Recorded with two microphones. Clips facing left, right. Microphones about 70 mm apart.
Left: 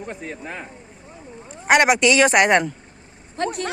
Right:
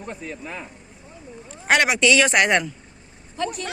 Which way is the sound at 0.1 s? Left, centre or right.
Left.